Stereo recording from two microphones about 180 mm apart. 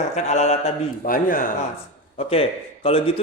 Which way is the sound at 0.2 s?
40° left (ahead or behind).